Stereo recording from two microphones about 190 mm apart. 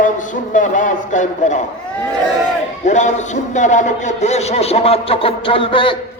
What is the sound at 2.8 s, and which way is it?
A man's voice, 40° left (ahead or behind).